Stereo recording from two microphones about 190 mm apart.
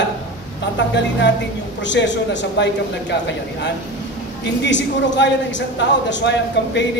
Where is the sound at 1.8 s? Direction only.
70° left (ahead or behind).